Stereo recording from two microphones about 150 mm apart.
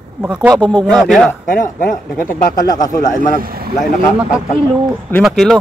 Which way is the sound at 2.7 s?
25° left (ahead or behind).